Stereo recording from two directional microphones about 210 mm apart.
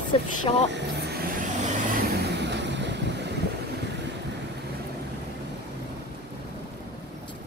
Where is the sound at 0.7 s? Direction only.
50° right (ahead or behind).